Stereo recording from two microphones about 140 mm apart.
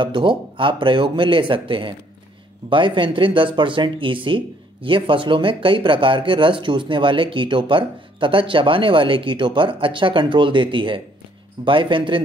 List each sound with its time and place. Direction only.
0.0 s speech: 35° right (ahead or behind)